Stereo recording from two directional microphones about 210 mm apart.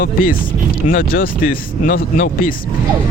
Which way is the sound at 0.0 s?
40° left (ahead or behind).